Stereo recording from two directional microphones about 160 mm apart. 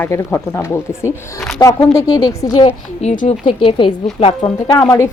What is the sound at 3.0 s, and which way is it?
Speech, 50° left (ahead or behind).